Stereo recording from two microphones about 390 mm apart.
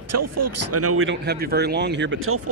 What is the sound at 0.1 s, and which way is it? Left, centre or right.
Speech, right.